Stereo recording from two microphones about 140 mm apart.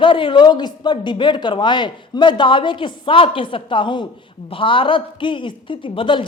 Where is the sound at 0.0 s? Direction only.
35° left (ahead or behind).